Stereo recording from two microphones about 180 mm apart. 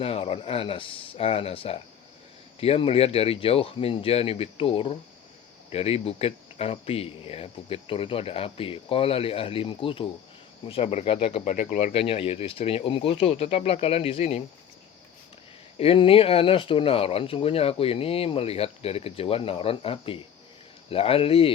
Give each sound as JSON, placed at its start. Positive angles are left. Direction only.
{"t": 0.0, "sound": "speech", "side_deg": 30}
{"t": 11.9, "sound": "speech", "side_deg": 30}
{"t": 15.8, "sound": "speech", "side_deg": 30}